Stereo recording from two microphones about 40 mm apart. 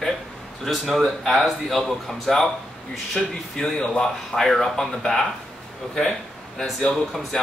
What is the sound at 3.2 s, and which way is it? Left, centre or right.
Speech, centre.